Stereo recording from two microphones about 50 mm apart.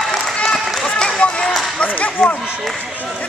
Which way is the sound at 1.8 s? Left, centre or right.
Left.